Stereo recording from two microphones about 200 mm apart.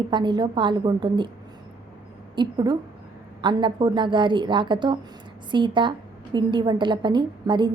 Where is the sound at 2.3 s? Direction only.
25° right (ahead or behind).